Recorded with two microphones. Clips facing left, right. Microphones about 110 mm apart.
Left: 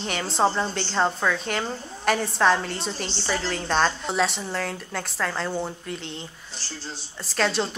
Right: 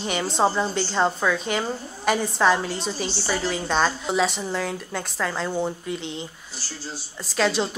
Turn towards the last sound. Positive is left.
turn(degrees=0)  # may be behind; listen again after turning